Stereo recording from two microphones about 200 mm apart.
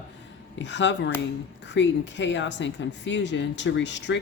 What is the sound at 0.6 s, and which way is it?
Speech, 65° left (ahead or behind).